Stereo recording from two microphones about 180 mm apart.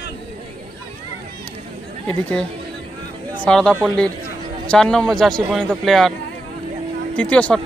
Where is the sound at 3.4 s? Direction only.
5° left (ahead or behind).